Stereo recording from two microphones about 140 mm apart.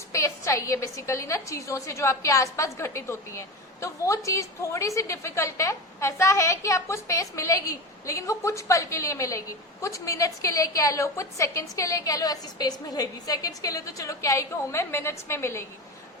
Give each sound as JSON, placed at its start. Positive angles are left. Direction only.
{"t": 0.1, "sound": "a woman's voice", "side_deg": 20}